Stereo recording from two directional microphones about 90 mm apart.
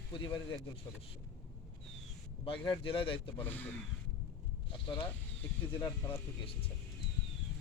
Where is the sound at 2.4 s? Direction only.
80° left.